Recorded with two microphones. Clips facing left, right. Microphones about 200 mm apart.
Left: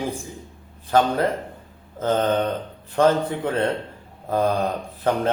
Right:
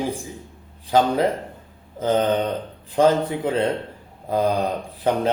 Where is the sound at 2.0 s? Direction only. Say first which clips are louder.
Right 1 dB; 10° right (ahead or behind).